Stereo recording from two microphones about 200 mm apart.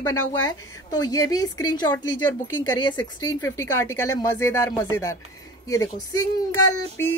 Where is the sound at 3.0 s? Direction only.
20° left (ahead or behind).